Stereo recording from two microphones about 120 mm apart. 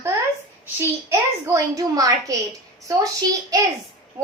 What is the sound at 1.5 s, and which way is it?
Speech, 30° right (ahead or behind).